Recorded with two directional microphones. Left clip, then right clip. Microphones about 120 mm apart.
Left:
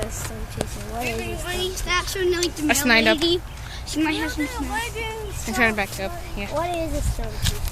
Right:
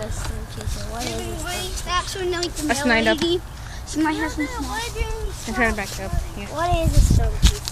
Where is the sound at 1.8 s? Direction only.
20° right (ahead or behind).